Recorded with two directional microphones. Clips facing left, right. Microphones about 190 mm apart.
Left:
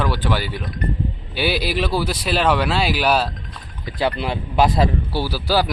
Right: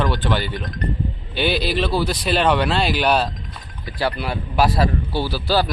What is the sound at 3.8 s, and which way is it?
A man's voice, 20° left (ahead or behind).